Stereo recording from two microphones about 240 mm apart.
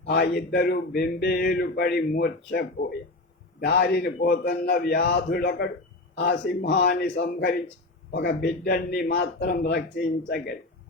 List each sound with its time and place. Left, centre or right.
0.0 s a man's voice: left